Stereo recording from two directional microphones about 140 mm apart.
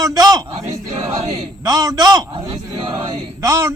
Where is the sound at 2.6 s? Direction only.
30° right (ahead or behind).